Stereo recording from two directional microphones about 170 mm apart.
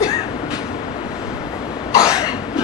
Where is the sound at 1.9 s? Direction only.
20° left (ahead or behind).